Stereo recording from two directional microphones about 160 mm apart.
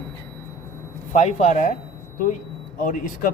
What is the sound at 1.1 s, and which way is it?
Speech, 45° left (ahead or behind).